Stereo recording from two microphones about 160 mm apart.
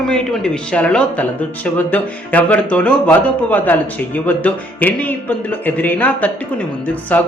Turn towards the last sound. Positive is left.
turn(degrees=10)  # may be behind; listen again after turning